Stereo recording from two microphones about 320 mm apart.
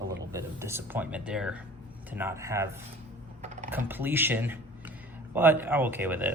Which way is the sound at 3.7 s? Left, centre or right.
Centre.